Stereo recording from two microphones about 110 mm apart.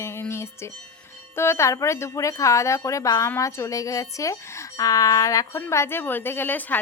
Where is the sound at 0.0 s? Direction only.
25° left (ahead or behind).